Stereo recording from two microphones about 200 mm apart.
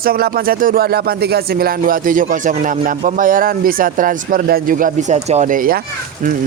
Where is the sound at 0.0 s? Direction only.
45° right (ahead or behind).